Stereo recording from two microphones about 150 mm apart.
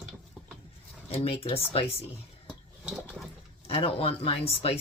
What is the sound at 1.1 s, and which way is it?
Speech, 40° left (ahead or behind).